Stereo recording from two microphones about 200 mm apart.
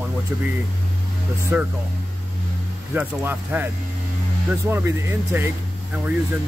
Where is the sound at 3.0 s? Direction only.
10° right (ahead or behind).